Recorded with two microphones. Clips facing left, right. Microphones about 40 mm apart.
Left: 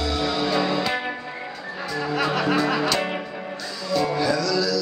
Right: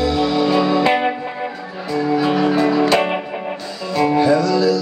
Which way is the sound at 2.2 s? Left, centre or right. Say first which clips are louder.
Right 4 dB; right.